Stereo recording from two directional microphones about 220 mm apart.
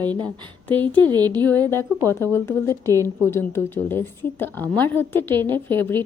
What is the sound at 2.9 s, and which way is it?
Speech, 15° right (ahead or behind).